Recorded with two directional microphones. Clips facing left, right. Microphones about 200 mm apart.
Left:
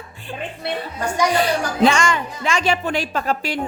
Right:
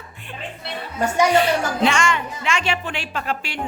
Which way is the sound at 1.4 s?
40° left (ahead or behind).